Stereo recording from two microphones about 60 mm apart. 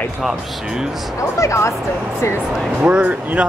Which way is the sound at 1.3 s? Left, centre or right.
Left.